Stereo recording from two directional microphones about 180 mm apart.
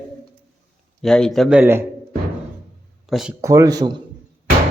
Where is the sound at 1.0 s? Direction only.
Centre (ahead or behind).